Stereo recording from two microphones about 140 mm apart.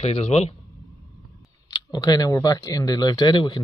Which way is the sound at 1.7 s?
25° left (ahead or behind).